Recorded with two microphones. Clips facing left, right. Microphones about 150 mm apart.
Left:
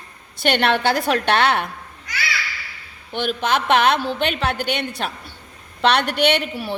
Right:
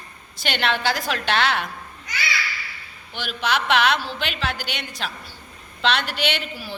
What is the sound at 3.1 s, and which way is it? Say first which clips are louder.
A woman's voice: left 4 dB; 50° left (ahead or behind).